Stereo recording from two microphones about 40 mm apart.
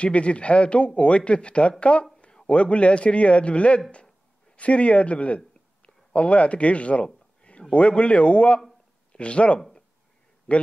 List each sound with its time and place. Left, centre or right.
0.0 s a man's voice: left
2.2 s a sound: left
2.6 s a man's voice: left